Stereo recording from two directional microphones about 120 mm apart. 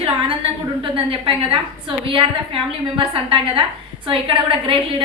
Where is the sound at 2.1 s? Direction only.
45° right (ahead or behind).